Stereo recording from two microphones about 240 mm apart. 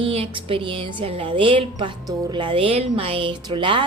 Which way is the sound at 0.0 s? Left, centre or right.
Right.